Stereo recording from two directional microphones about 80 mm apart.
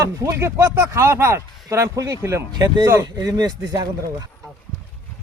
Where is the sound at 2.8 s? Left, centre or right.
Right.